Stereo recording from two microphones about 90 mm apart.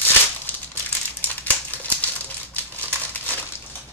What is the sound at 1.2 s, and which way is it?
Crumpling, 20° left (ahead or behind).